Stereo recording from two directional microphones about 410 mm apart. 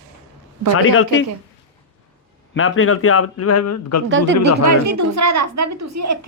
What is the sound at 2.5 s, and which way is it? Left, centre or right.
Speech, left.